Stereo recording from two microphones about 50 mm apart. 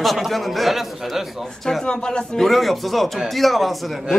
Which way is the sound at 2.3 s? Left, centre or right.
Centre.